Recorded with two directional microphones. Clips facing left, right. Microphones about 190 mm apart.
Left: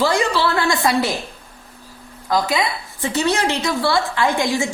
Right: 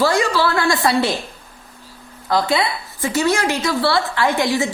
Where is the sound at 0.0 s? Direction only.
20° left (ahead or behind).